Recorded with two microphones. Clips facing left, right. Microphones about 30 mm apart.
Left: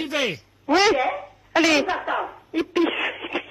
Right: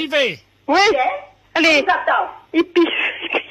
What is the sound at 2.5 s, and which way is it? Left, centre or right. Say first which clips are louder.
Speech: right 7 dB; right.